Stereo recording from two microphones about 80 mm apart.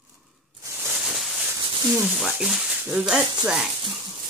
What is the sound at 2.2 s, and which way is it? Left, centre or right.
Speech, centre.